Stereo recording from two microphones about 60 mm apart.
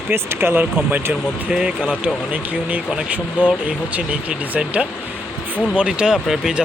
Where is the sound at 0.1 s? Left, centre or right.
Right.